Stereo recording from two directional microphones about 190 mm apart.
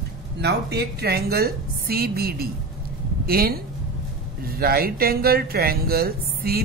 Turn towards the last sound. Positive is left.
turn(degrees=-55)  # may be behind; listen again after turning